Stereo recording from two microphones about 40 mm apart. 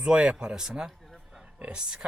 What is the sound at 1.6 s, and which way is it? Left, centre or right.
Speech, right.